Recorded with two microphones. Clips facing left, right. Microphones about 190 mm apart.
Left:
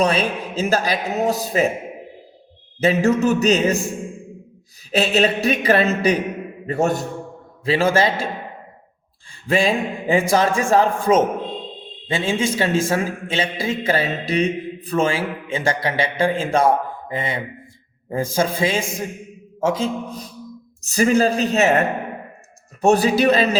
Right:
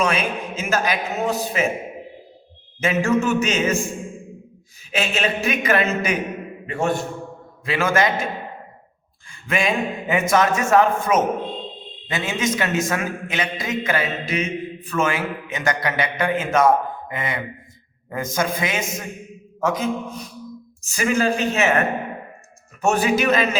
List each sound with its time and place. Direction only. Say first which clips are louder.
0.0 s a man's voice: left 3 dB; 35° left (ahead or behind)
2.8 s a man's voice: left 3 dB; 35° left (ahead or behind)
4.9 s a man's voice: left 5 dB; 35° left (ahead or behind)
9.5 s a man's voice: left 3 dB; 30° left (ahead or behind)